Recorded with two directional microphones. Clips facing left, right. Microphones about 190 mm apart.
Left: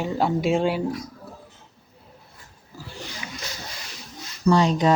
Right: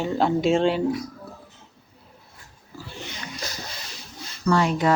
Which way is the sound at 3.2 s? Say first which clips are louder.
Even; 10° left (ahead or behind).